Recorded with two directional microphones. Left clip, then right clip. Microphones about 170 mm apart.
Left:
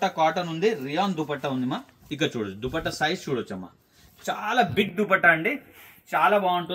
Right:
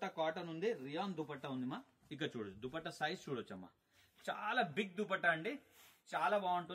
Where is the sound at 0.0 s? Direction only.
35° left (ahead or behind).